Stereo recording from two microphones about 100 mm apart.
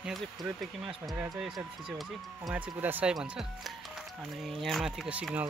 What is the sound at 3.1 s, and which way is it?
Speech, 5° right (ahead or behind).